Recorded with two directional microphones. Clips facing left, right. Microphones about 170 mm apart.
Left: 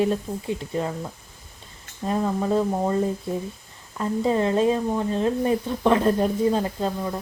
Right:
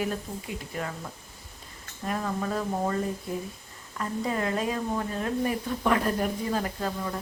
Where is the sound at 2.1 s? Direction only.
25° left (ahead or behind).